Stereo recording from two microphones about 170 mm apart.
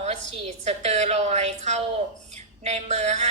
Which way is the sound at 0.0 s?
40° right (ahead or behind).